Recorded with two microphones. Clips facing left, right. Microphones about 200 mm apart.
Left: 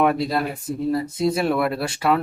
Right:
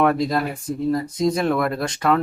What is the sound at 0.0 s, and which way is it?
Speech, 10° left (ahead or behind).